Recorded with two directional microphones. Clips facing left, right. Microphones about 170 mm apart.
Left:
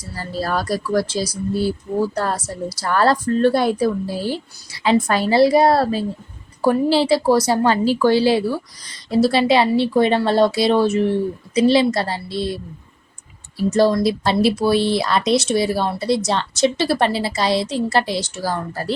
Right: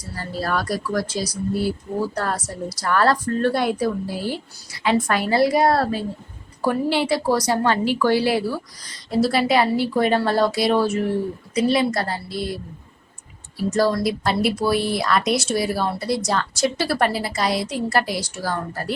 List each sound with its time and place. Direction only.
0.4 s a woman's voice: 30° left (ahead or behind)
13.7 s speech: 25° left (ahead or behind)